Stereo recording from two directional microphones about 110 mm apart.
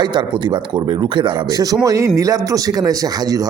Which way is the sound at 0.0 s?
45° right (ahead or behind).